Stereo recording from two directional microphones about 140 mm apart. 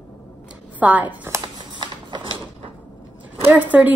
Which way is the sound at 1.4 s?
35° right (ahead or behind).